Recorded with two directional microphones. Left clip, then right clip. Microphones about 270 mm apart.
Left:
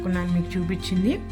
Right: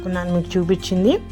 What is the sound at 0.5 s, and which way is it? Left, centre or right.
Speech, right.